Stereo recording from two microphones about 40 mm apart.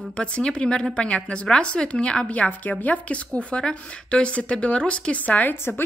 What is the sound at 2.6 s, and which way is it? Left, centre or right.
A woman's voice, left.